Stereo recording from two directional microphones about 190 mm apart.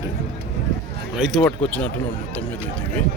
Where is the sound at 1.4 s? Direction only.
5° left (ahead or behind).